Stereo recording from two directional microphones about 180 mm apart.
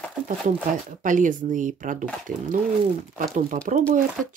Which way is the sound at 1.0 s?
45° right (ahead or behind).